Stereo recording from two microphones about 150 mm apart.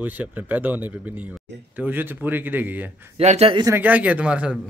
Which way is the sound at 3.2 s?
50° right (ahead or behind).